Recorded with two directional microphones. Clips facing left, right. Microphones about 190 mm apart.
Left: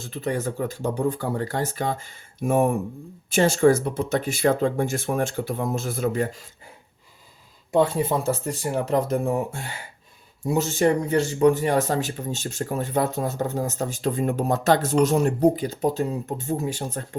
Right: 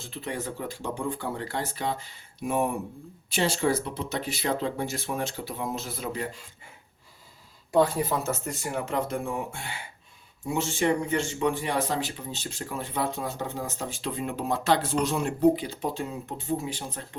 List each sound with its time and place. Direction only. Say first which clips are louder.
0.0 s speech: left 7 dB; 45° left (ahead or behind)
7.7 s speech: left 3 dB; 25° left (ahead or behind); by 17.0 s 45° left (ahead or behind)